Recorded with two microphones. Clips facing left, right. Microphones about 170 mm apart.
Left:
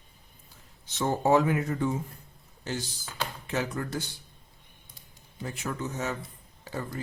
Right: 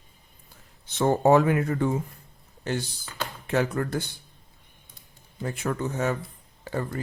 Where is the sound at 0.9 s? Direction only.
55° right (ahead or behind).